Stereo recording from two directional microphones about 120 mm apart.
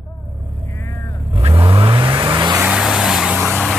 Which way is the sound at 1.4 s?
45° right (ahead or behind).